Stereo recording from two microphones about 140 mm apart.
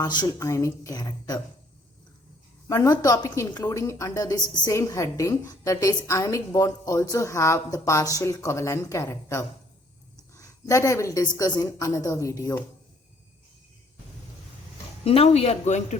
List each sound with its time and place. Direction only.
0.0 s a woman's voice: 25° left (ahead or behind)
2.6 s a woman's voice: 25° left (ahead or behind)
15.0 s speech: 45° left (ahead or behind)